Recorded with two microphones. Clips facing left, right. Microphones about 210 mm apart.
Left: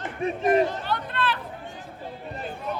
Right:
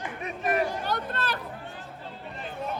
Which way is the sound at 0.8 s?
45° right (ahead or behind).